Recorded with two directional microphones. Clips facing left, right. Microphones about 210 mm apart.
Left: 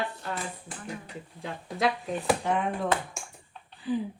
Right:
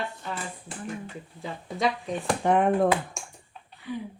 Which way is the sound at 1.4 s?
Centre (ahead or behind).